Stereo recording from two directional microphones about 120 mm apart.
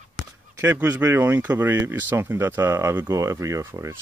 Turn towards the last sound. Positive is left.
turn(degrees=-25)  # may be behind; listen again after turning